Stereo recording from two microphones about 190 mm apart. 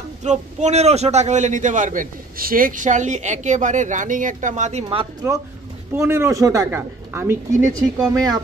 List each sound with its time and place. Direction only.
0.2 s a man's voice: 35° right (ahead or behind)
5.2 s speech: 15° right (ahead or behind)